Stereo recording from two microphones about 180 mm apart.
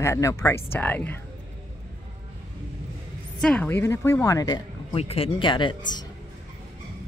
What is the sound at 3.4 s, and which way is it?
Speech, 5° left (ahead or behind).